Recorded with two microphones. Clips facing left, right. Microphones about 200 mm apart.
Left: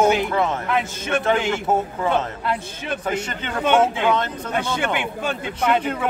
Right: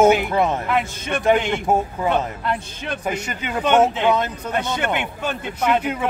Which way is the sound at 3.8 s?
10° right (ahead or behind).